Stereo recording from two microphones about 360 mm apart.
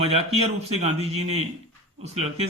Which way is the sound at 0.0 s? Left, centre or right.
Centre.